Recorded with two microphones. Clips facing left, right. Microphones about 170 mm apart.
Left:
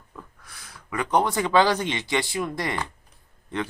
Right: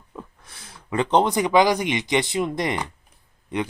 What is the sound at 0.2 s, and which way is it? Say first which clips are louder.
Speech: right 5 dB; 25° right (ahead or behind).